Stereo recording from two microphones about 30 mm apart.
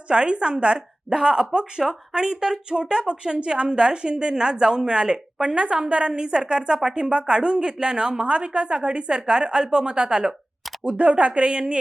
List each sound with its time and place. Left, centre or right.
0.1 s a woman's voice: right
5.5 s a woman's voice: right
10.8 s speech: right